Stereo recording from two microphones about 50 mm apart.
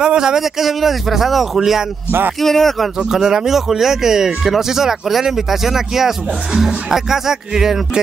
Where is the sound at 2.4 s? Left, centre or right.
Centre.